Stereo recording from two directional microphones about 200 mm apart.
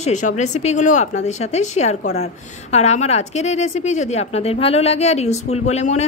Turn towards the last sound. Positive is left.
turn(degrees=35)  # may be behind; listen again after turning